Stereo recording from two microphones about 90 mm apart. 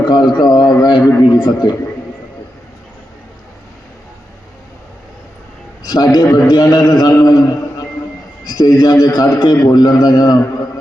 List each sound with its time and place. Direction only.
0.0 s a sound: 55° left (ahead or behind)
1.2 s a man's voice: 55° left (ahead or behind)
5.8 s a man's voice: 45° left (ahead or behind)